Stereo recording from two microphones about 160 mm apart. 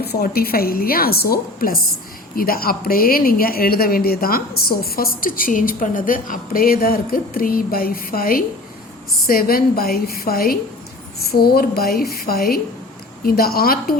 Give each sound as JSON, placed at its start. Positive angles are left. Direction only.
{"t": 0.0, "sound": "a woman's voice", "side_deg": 80}